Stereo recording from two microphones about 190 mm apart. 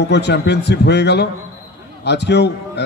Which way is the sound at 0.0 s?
60° left (ahead or behind).